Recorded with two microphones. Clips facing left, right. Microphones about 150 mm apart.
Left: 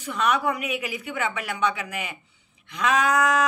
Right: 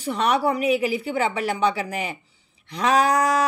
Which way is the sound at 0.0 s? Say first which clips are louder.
Right 3 dB; 35° right (ahead or behind).